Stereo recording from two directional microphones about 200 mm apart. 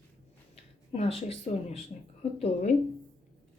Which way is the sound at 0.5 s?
30° left (ahead or behind).